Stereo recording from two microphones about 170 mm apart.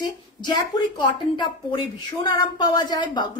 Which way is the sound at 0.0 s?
25° left (ahead or behind).